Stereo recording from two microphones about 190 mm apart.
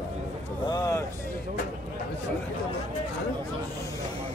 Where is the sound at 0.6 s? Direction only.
20° left (ahead or behind).